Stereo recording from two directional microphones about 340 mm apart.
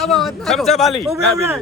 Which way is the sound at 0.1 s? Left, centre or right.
Centre.